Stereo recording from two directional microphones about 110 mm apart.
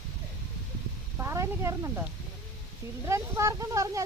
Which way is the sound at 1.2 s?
25° right (ahead or behind).